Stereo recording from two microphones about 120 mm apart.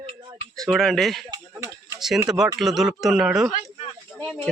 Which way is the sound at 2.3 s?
30° right (ahead or behind).